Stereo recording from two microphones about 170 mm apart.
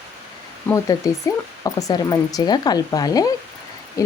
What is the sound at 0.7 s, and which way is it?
Speech, 20° left (ahead or behind).